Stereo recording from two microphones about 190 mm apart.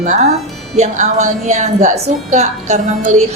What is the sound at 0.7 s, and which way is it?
A woman's voice, 40° right (ahead or behind).